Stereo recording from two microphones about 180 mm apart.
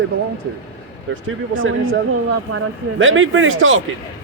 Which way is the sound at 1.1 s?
90° right.